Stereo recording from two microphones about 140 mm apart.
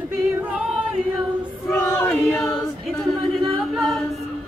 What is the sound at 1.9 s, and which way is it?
Choir, 5° left (ahead or behind).